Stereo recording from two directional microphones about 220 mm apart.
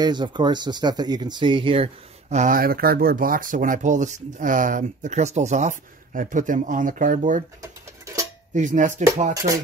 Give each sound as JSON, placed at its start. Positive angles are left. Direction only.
{"t": 0.0, "sound": "speech", "side_deg": -20}
{"t": 8.5, "sound": "speech", "side_deg": -35}